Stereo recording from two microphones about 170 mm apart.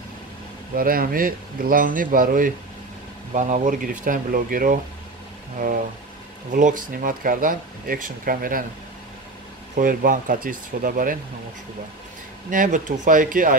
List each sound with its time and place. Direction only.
0.7 s speech: 60° right (ahead or behind)
6.5 s speech: 50° right (ahead or behind)
9.8 s speech: 55° right (ahead or behind)
12.4 s speech: 50° right (ahead or behind)